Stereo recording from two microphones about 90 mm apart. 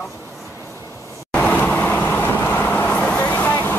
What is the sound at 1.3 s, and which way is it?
Vehicle, 15° left (ahead or behind).